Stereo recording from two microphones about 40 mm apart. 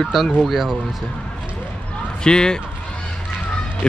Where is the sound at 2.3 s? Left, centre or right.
Centre.